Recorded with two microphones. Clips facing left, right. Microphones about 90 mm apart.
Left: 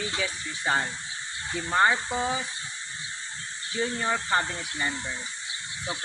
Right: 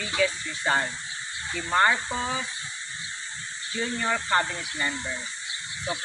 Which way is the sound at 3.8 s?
20° left (ahead or behind).